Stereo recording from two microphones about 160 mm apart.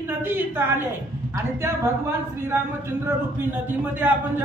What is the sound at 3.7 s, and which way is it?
Speech, 10° right (ahead or behind).